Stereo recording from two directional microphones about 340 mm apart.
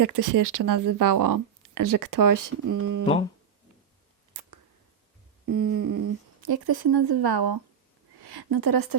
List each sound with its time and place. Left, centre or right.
0.0 s speech: right
5.5 s a woman's voice: right